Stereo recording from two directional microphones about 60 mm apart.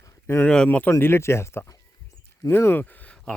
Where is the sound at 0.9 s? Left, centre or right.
Left.